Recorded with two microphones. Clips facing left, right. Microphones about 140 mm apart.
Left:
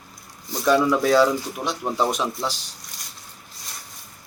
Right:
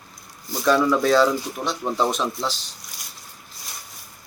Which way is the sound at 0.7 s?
10° left (ahead or behind).